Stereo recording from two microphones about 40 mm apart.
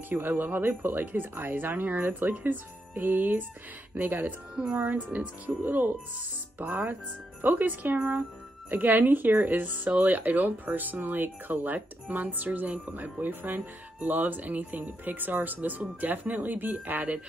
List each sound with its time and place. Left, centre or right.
0.1 s speech: right
0.6 s speech: right
4.7 s speech: right
5.7 s speech: right
6.6 s speech: right